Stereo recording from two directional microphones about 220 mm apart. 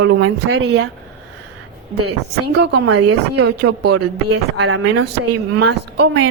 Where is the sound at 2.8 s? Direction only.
90° right.